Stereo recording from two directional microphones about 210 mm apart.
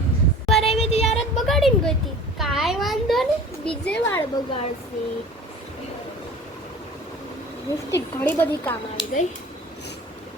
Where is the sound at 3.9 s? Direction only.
10° left (ahead or behind).